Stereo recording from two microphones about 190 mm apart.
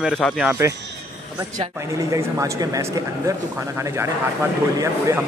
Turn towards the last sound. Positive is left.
turn(degrees=-15)  # may be behind; listen again after turning